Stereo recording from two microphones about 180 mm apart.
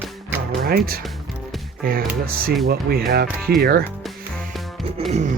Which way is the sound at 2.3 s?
55° right (ahead or behind).